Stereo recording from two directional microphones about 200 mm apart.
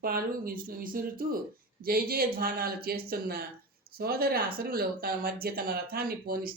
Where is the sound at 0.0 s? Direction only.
45° right (ahead or behind).